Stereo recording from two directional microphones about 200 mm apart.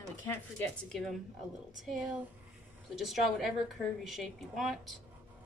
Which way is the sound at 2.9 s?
Centre (ahead or behind).